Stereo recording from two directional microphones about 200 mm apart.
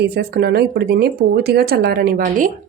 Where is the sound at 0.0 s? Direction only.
55° right (ahead or behind).